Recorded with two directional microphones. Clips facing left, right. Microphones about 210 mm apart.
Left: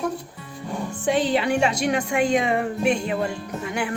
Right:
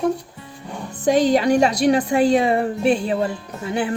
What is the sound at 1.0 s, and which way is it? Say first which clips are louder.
A woman's voice: right 6 dB; 40° right (ahead or behind).